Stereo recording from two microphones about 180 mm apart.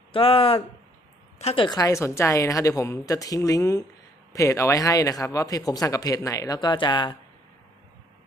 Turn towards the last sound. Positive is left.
turn(degrees=25)  # may be behind; listen again after turning